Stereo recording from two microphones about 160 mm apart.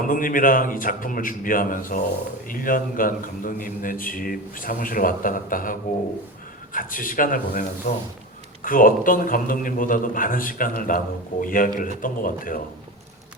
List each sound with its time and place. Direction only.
0.1 s a man's voice: 60° left (ahead or behind)
6.7 s a man's voice: 60° left (ahead or behind)
8.6 s a man's voice: 60° left (ahead or behind)